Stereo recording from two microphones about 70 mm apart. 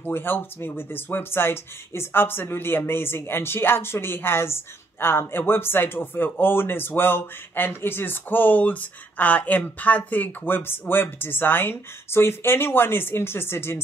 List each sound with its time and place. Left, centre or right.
0.0 s speech: left